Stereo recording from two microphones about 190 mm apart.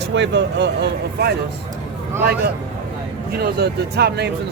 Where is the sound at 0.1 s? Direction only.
70° right (ahead or behind).